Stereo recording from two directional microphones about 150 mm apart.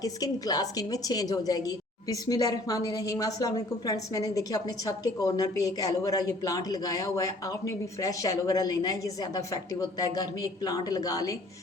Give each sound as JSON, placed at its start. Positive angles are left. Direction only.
{"t": 0.0, "sound": "a woman's voice", "side_deg": 25}